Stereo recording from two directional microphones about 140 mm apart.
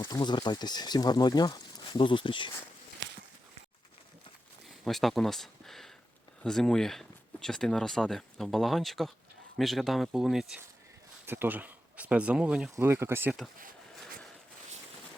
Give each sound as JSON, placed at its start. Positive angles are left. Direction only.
{"t": 0.0, "sound": "speech", "side_deg": 35}
{"t": 4.8, "sound": "speech", "side_deg": 0}
{"t": 11.3, "sound": "speech", "side_deg": -15}
{"t": 12.7, "sound": "speech", "side_deg": -15}